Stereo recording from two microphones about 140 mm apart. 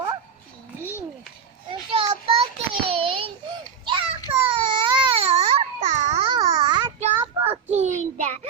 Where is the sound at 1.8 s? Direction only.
45° right (ahead or behind).